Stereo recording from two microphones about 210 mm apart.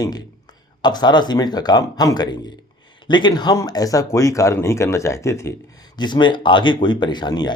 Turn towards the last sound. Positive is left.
turn(degrees=20)  # may be behind; listen again after turning